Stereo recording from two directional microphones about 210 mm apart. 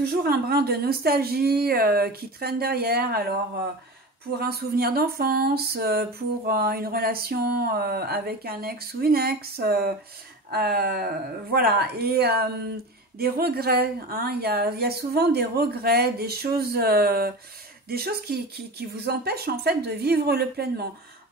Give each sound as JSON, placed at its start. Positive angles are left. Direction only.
{"t": 0.0, "sound": "speech", "side_deg": -45}
{"t": 4.4, "sound": "speech", "side_deg": -50}